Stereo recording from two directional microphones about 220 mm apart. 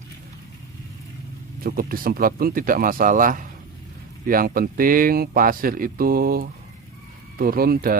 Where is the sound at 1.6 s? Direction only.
40° right (ahead or behind).